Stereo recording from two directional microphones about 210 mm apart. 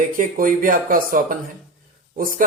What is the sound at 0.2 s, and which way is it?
Speech, 40° right (ahead or behind).